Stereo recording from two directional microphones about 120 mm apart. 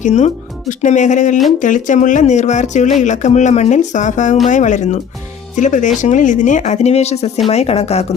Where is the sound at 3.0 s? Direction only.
90° left; by 8.1 s 60° left (ahead or behind).